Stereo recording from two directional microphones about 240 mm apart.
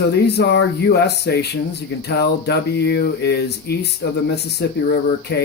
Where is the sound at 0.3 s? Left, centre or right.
Left.